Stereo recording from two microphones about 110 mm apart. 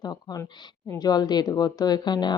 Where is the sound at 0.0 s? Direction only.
40° left (ahead or behind).